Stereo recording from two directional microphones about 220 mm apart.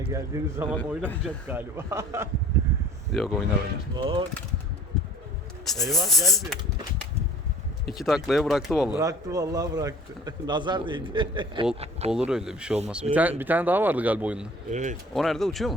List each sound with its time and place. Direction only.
0.1 s speech: 15° right (ahead or behind)
0.8 s speech: 5° left (ahead or behind)
1.5 s speech: 10° right (ahead or behind)
3.1 s speech: centre (ahead or behind)
3.9 s a man's voice: 20° right (ahead or behind)
5.6 s speech: centre (ahead or behind)
7.9 s speech: centre (ahead or behind)
9.0 s a man's voice: 15° right (ahead or behind)
12.1 s speech: 5° right (ahead or behind)
14.7 s speech: 35° right (ahead or behind)
15.1 s speech: centre (ahead or behind)